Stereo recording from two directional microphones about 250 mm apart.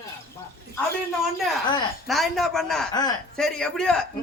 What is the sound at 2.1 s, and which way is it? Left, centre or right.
A man's voice, centre.